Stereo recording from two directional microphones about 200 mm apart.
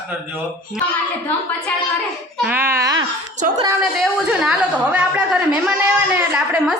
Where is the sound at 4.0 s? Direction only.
5° right (ahead or behind).